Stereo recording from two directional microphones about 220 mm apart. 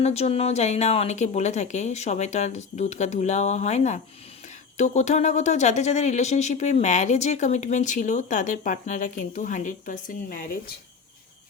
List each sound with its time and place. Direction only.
0.0 s speech: 30° left (ahead or behind)